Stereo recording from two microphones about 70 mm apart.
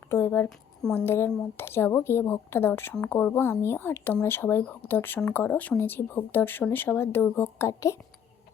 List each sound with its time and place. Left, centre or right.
0.1 s speech: left
7.7 s a woman's voice: left